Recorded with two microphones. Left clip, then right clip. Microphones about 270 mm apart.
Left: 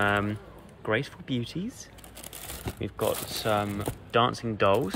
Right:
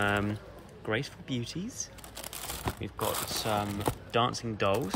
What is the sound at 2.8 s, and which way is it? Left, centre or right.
Speech, centre.